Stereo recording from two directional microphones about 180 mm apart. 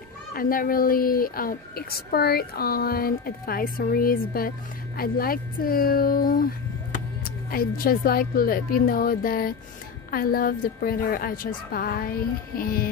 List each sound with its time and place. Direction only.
0.3 s speech: 55° left (ahead or behind)